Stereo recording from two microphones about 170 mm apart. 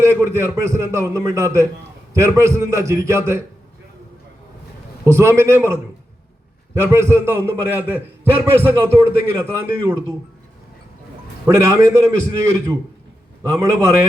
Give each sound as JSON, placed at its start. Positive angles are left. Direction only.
{"t": 0.0, "sound": "a man's voice", "side_deg": -15}
{"t": 5.0, "sound": "a man's voice", "side_deg": -15}
{"t": 11.4, "sound": "a man's voice", "side_deg": -15}
{"t": 13.4, "sound": "a man's voice", "side_deg": -20}